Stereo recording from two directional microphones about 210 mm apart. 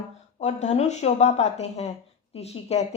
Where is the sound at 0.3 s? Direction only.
30° left (ahead or behind).